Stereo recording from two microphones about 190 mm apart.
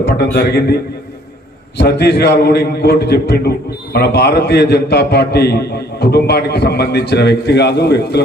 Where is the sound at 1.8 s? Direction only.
60° left (ahead or behind).